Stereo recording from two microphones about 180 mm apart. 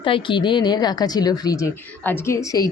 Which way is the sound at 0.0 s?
30° left (ahead or behind).